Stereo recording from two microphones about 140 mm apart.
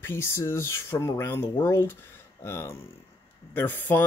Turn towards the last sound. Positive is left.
turn(degrees=15)  # may be behind; listen again after turning